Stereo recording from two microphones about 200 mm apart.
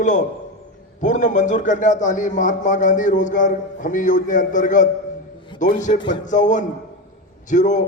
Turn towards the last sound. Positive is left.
turn(degrees=40)  # may be behind; listen again after turning